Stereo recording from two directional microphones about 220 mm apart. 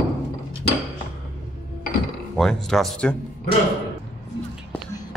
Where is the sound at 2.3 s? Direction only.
Centre (ahead or behind).